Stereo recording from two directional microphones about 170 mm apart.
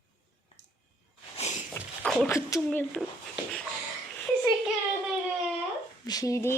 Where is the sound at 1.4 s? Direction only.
40° left (ahead or behind).